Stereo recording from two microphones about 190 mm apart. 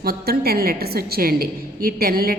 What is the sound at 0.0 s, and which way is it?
A woman's voice, 55° right (ahead or behind).